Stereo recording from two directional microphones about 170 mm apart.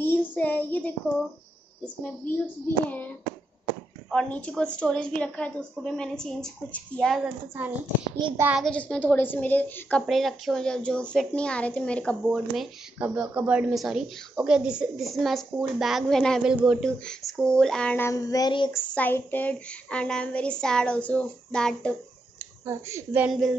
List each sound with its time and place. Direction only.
0.0 s child singing: 10° left (ahead or behind)
2.0 s a sound: 15° left (ahead or behind)
4.1 s a woman's voice: 5° left (ahead or behind)
8.4 s speech: 10° right (ahead or behind)
8.6 s a woman's voice: 5° left (ahead or behind); by 18.7 s 25° left (ahead or behind)
18.7 s a sound: 15° left (ahead or behind)
22.7 s speech: 15° right (ahead or behind)
23.2 s a woman's voice: centre (ahead or behind)